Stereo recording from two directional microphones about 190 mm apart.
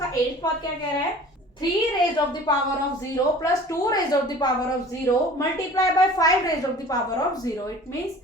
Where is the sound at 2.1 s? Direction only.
20° left (ahead or behind).